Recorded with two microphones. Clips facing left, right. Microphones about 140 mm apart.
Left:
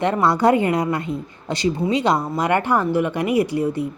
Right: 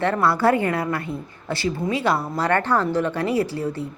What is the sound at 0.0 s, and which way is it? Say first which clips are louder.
A woman's voice: left 2 dB; 20° left (ahead or behind).